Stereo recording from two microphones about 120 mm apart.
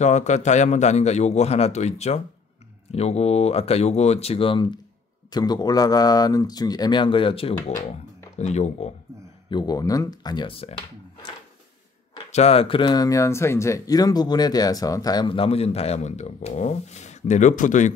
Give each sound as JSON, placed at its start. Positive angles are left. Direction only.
{"t": 0.0, "sound": "speech", "side_deg": 80}
{"t": 8.4, "sound": "speech", "side_deg": 70}
{"t": 9.5, "sound": "speech", "side_deg": 35}
{"t": 12.3, "sound": "speech", "side_deg": 60}
{"t": 15.2, "sound": "speech", "side_deg": 50}